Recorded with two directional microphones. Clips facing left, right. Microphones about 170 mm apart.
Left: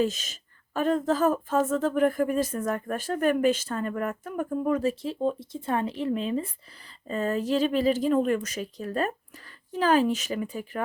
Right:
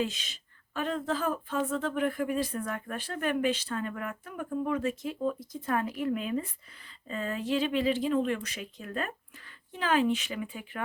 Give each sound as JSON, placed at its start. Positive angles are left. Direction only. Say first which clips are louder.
{"t": 0.0, "sound": "speech", "louder": "left 6 dB", "side_deg": 45}
{"t": 7.1, "sound": "speech", "louder": "left 5 dB", "side_deg": 40}